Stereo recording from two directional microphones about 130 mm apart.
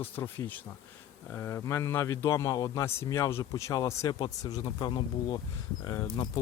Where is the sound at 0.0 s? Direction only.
15° left (ahead or behind).